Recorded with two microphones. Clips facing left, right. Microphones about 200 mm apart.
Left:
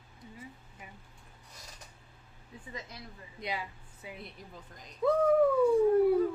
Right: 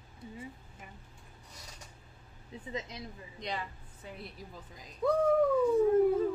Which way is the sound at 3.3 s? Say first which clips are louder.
Left 1 dB; 5° left (ahead or behind).